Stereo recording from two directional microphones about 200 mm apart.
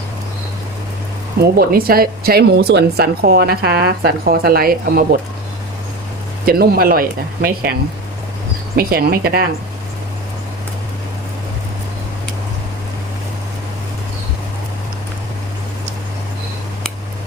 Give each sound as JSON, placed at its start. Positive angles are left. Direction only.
{"t": 1.4, "sound": "speech", "side_deg": -50}
{"t": 6.4, "sound": "speech", "side_deg": -50}
{"t": 8.7, "sound": "speech", "side_deg": -50}